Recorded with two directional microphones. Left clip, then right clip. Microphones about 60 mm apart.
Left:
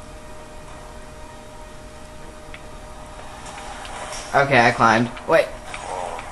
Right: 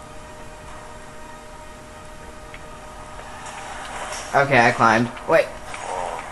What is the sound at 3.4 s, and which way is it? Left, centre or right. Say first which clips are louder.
Vehicle: right 1 dB; right.